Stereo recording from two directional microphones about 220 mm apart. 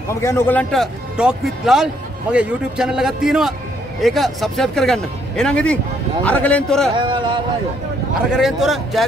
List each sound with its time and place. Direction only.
0.1 s a man's voice: 10° left (ahead or behind)
7.0 s speech: 20° right (ahead or behind)
8.3 s speech: centre (ahead or behind)